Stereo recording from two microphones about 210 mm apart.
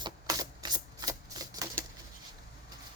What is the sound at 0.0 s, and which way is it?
Typewriter, 20° right (ahead or behind).